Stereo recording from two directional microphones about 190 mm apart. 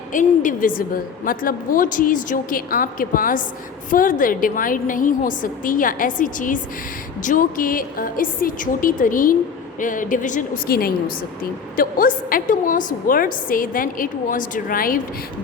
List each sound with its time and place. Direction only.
0.1 s a woman's voice: 45° left (ahead or behind)